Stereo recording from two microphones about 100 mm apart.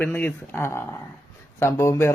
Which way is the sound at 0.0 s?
20° left (ahead or behind).